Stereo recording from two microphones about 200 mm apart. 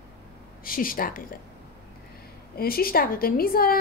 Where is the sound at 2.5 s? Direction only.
50° left (ahead or behind).